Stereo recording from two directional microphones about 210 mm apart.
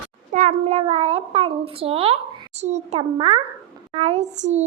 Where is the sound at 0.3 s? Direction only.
35° right (ahead or behind).